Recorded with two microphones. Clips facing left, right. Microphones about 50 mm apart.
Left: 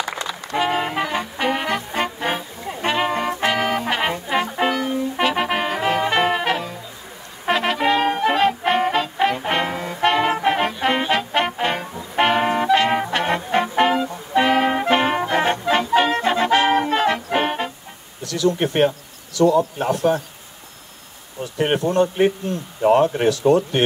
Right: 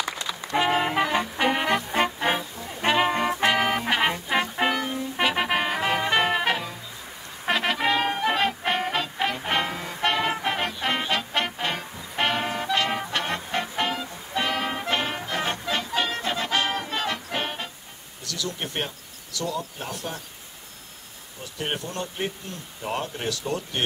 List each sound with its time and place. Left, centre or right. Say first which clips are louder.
0.6 s music: left 1 dB; centre; by 17.6 s left
18.2 s a sound: left 12 dB; left
18.6 s speech: left 13 dB; left
21.5 s speech: left 13 dB; left